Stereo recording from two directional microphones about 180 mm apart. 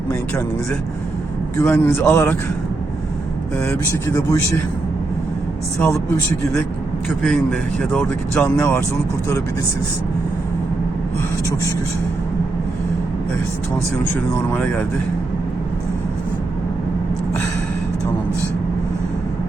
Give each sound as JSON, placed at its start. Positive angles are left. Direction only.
{"t": 1.5, "sound": "a man's voice", "side_deg": 10}
{"t": 3.6, "sound": "a man's voice", "side_deg": 15}
{"t": 5.8, "sound": "a man's voice", "side_deg": 10}
{"t": 14.5, "sound": "a man's voice", "side_deg": 10}